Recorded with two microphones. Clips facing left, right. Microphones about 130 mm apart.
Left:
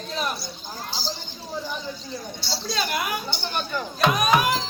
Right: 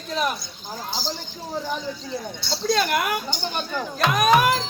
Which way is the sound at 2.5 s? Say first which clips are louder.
Right 6 dB; 55° right (ahead or behind).